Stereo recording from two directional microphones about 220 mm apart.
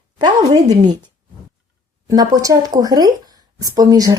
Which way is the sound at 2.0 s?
15° right (ahead or behind).